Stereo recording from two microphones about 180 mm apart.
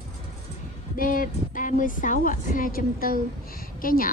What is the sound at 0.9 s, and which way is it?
A woman's voice, 50° left (ahead or behind).